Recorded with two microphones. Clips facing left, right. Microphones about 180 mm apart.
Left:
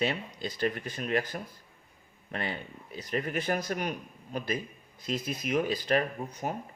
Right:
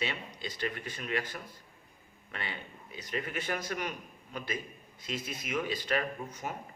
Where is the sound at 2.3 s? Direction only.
40° left (ahead or behind).